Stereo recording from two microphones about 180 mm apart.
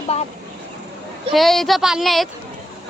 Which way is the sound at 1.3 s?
Centre (ahead or behind).